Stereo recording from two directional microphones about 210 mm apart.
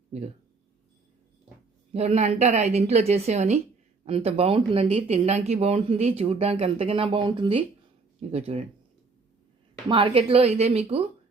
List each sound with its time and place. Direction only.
1.9 s a woman's voice: 30° right (ahead or behind)
9.9 s speech: 25° right (ahead or behind)